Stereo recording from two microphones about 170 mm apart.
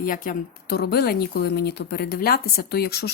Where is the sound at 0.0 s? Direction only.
55° left (ahead or behind).